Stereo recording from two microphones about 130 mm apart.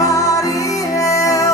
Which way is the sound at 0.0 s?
25° left (ahead or behind).